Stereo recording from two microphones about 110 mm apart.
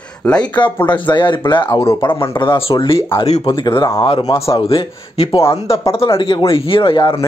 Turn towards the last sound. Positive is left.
turn(degrees=50)  # may be behind; listen again after turning